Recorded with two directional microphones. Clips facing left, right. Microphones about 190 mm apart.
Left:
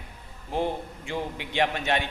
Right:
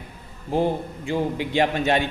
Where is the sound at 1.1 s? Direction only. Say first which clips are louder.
Right 8 dB; 35° right (ahead or behind).